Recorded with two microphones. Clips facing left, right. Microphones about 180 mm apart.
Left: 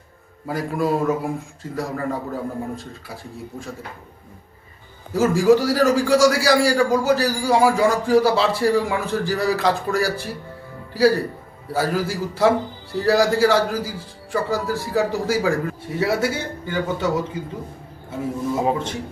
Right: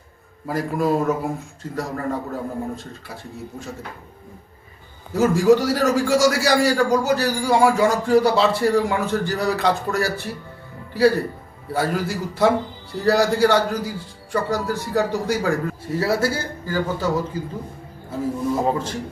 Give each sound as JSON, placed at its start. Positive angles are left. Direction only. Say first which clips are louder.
{"t": 0.4, "sound": "a man's voice", "louder": "right 1 dB", "side_deg": 0}
{"t": 5.1, "sound": "a man's voice", "louder": "even", "side_deg": 0}